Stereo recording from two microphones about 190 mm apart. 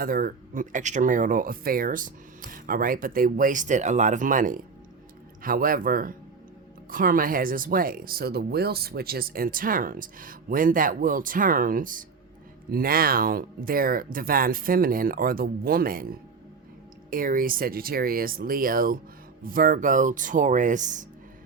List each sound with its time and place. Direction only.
0.0 s speech: 50° right (ahead or behind)